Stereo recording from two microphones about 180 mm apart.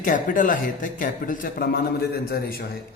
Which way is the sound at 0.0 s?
45° left (ahead or behind).